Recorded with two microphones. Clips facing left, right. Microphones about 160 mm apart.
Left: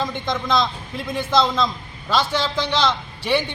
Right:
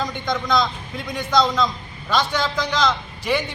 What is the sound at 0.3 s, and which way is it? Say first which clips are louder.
Speech: right 1 dB; 25° left (ahead or behind).